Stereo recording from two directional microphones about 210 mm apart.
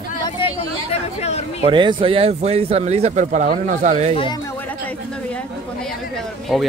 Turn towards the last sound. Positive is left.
turn(degrees=0)  # may be behind; listen again after turning